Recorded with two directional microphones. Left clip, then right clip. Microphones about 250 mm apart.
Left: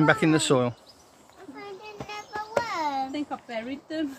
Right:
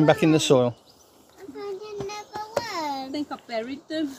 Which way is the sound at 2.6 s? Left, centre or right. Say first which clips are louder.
Left 2 dB; centre.